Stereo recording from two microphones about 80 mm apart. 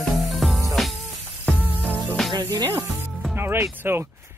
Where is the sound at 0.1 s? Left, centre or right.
Centre.